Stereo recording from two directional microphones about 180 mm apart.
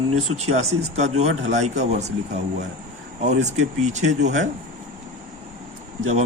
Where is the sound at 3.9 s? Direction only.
40° right (ahead or behind).